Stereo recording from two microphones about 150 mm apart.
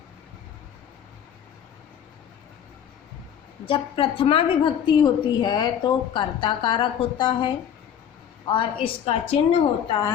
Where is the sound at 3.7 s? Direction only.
35° left (ahead or behind).